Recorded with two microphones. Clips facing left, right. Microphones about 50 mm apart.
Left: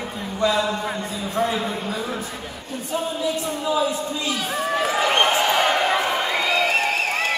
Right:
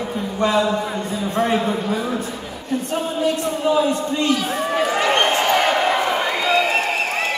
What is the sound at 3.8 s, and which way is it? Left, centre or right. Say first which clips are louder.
Speech: right 5 dB; right.